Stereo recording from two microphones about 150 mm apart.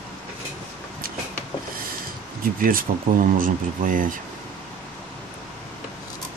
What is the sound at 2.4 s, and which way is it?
Speech, 70° right (ahead or behind).